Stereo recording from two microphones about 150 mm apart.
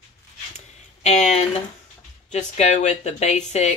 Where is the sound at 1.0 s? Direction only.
45° left (ahead or behind).